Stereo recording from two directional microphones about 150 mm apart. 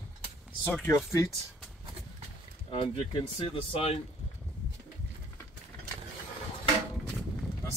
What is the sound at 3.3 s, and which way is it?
Speech, 40° left (ahead or behind).